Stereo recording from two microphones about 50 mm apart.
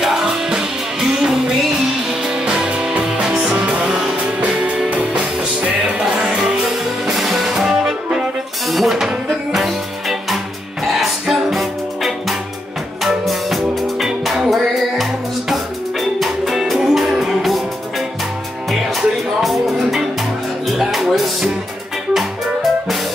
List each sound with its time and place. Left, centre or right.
0.0 s music: centre
5.9 s music: centre
18.7 s music: centre